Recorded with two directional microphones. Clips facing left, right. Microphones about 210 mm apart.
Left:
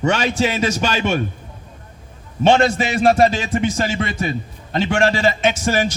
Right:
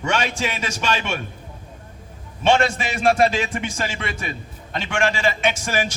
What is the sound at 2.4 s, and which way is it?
A man's voice, 35° left (ahead or behind).